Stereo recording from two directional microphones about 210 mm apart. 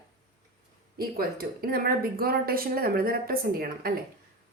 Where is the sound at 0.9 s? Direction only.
45° right (ahead or behind).